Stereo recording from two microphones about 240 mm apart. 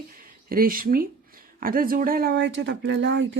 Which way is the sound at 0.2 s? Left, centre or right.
Right.